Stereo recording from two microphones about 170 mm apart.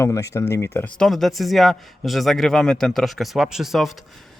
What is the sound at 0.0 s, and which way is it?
Speech, 20° left (ahead or behind).